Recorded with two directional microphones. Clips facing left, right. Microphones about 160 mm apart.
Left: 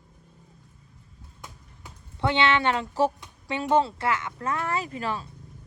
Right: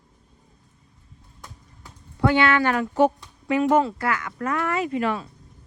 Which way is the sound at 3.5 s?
30° left (ahead or behind).